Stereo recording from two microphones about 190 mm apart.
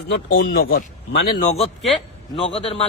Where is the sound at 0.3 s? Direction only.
50° left (ahead or behind).